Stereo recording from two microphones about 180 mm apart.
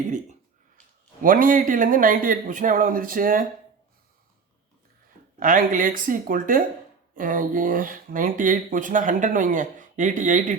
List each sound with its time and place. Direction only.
1.2 s speech: 50° right (ahead or behind)
5.4 s speech: 50° right (ahead or behind)